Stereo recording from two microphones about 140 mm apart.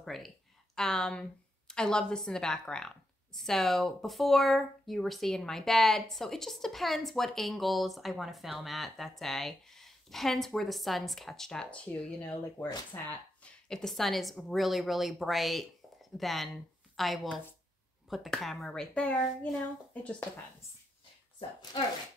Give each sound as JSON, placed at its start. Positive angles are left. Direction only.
{"t": 0.0, "sound": "speech", "side_deg": 0}
{"t": 21.4, "sound": "speech", "side_deg": 40}